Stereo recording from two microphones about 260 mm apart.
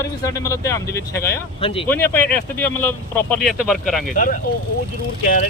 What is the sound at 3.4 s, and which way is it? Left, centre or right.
Speech, centre.